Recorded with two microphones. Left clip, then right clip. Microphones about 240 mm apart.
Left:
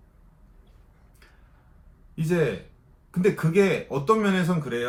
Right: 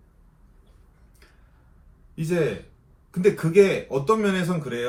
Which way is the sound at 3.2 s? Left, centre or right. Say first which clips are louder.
Right 4 dB; centre.